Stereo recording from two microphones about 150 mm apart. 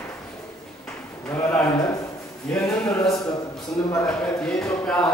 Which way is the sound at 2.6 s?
5° left (ahead or behind).